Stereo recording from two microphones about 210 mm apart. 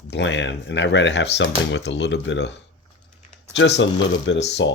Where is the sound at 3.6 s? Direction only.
60° left (ahead or behind).